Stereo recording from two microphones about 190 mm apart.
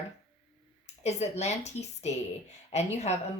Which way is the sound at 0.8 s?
35° left (ahead or behind).